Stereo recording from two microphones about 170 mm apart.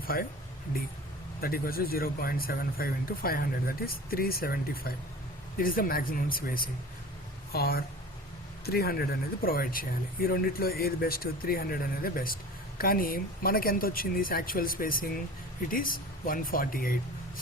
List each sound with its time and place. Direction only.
0.1 s speech: 65° left (ahead or behind)
1.4 s speech: 60° left (ahead or behind)